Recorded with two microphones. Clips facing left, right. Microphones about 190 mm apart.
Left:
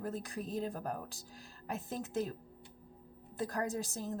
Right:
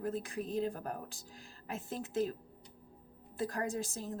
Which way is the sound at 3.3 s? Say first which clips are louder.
Even; 40° left (ahead or behind).